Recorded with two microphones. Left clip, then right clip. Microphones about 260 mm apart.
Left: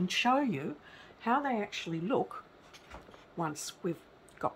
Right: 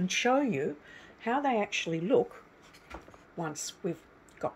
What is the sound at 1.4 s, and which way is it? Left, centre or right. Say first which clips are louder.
Speech: right 5 dB; left.